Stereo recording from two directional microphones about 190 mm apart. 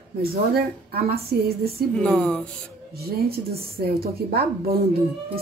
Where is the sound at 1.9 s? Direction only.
5° left (ahead or behind).